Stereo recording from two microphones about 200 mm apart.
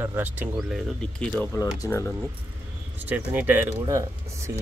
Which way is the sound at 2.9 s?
10° right (ahead or behind).